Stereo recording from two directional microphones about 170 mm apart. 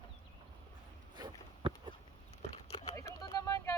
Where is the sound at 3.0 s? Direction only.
20° left (ahead or behind).